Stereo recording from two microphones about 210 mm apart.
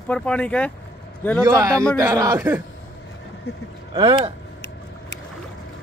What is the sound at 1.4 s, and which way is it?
Speech, 15° right (ahead or behind).